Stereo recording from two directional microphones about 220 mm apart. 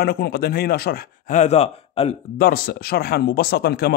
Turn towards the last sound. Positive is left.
turn(degrees=45)  # may be behind; listen again after turning